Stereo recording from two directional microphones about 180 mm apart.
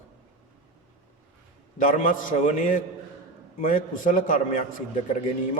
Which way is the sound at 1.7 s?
45° left (ahead or behind).